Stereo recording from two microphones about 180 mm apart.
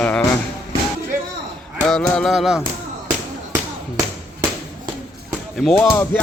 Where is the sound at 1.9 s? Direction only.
5° left (ahead or behind).